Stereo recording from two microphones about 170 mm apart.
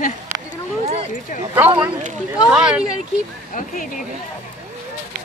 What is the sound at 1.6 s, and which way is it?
Speech, 10° right (ahead or behind).